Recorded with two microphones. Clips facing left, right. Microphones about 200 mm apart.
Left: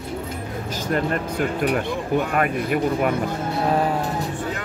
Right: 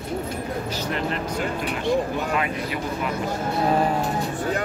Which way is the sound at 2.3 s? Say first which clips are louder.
Left 4 dB; 55° left (ahead or behind).